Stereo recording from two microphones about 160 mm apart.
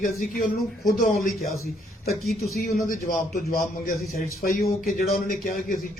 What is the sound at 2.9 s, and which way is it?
A man's voice, 60° left (ahead or behind).